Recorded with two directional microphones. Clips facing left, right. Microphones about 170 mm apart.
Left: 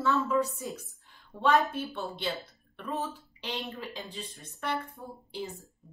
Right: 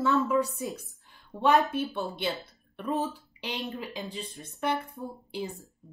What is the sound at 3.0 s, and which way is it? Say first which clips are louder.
A woman's voice: right 3 dB; 20° right (ahead or behind).